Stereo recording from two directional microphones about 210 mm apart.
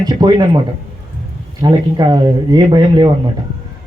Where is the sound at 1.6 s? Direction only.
20° right (ahead or behind).